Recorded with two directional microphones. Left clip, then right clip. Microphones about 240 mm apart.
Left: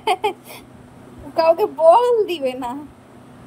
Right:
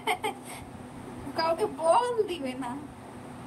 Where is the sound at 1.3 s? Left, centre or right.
Left.